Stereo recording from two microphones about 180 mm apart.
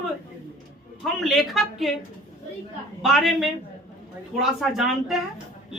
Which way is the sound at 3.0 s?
Centre (ahead or behind).